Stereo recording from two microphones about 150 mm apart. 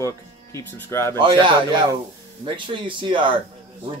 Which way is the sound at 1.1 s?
30° right (ahead or behind).